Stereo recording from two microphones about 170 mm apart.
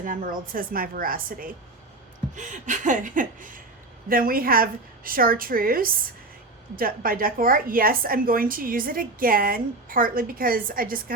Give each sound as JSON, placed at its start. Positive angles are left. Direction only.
{"t": 0.0, "sound": "a woman's voice", "side_deg": -55}
{"t": 2.3, "sound": "chuckle", "side_deg": -45}
{"t": 4.1, "sound": "a woman's voice", "side_deg": -60}